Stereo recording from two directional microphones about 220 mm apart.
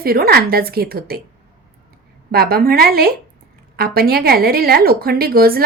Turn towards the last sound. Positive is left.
turn(degrees=-45)  # may be behind; listen again after turning